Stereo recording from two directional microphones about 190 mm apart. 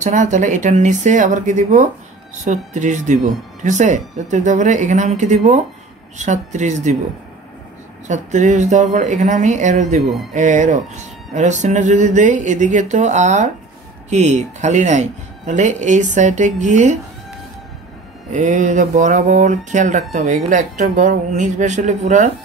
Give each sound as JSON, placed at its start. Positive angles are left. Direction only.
{"t": 0.0, "sound": "speech", "side_deg": -40}
{"t": 8.1, "sound": "speech", "side_deg": -40}
{"t": 18.3, "sound": "speech", "side_deg": -40}